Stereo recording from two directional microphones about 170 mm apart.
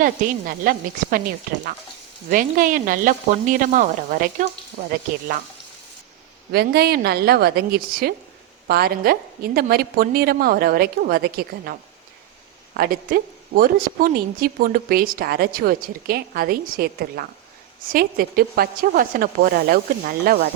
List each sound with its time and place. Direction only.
0.0 s a woman's voice: 55° right (ahead or behind)
2.3 s speech: 55° right (ahead or behind)
6.5 s a woman's voice: 70° right (ahead or behind)